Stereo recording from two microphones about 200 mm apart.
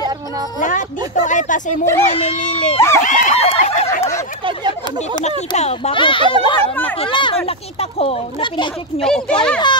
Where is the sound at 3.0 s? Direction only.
35° left (ahead or behind).